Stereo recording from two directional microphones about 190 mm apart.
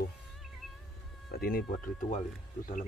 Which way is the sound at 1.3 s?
55° left (ahead or behind).